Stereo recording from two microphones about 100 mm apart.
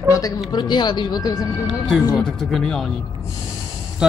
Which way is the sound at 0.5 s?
50° left (ahead or behind).